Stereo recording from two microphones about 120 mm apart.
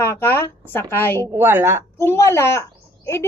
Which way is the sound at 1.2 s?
20° right (ahead or behind).